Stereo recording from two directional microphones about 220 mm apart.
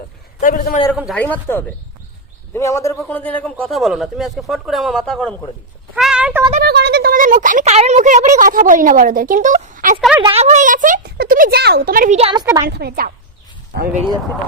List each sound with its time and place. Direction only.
0.3 s a man's voice: 35° left (ahead or behind)
0.9 s speech: centre (ahead or behind)
1.2 s a man's voice: 10° left (ahead or behind)
5.9 s a sound: 5° right (ahead or behind)
6.6 s speech: 45° right (ahead or behind)
10.2 s speech: 25° right (ahead or behind)
12.6 s a woman's voice: 45° right (ahead or behind)